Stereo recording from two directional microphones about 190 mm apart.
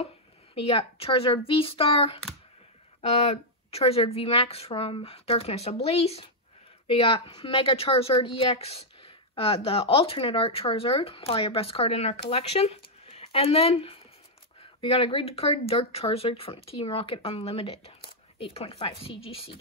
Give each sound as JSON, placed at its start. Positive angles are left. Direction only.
{"t": 0.6, "sound": "a woman's voice", "side_deg": 30}